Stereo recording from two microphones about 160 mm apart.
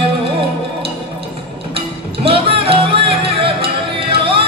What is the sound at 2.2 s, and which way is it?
Music, 35° right (ahead or behind).